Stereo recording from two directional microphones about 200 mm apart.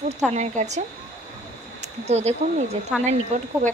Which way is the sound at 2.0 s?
30° right (ahead or behind).